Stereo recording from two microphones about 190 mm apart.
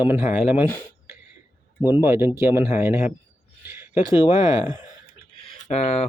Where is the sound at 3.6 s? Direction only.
10° right (ahead or behind).